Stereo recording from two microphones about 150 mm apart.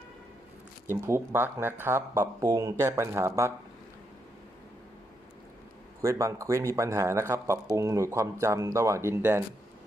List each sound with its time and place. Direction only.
0.9 s speech: 15° right (ahead or behind)
6.0 s speech: 20° right (ahead or behind)